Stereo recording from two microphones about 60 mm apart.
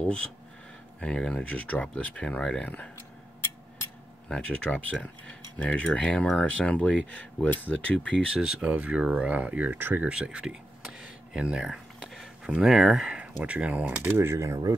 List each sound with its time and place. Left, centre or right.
0.0 s speech: centre
1.3 s speech: left
2.6 s speech: left
4.3 s speech: centre
8.4 s speech: centre
8.6 s speech: right
10.0 s speech: centre
10.4 s a sound: centre
13.2 s speech: right
14.1 s speech: right